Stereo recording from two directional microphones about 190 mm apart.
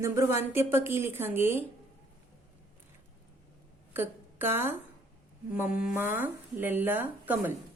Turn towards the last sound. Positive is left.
turn(degrees=-10)  # may be behind; listen again after turning